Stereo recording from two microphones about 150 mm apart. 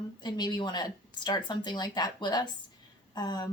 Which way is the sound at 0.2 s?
30° left (ahead or behind).